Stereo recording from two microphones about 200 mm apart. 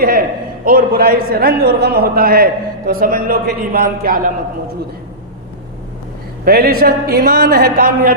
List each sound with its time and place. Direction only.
0.0 s a man's voice: 50° right (ahead or behind)
6.4 s a man's voice: 50° right (ahead or behind)